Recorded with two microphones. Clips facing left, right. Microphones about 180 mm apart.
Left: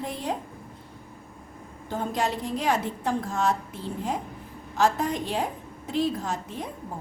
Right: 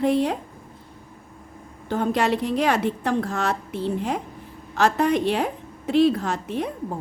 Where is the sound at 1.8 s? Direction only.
70° right (ahead or behind).